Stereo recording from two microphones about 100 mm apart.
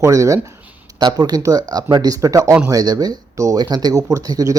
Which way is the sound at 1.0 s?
40° right (ahead or behind).